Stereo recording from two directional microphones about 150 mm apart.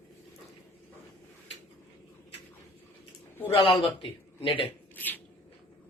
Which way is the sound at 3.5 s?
35° left (ahead or behind).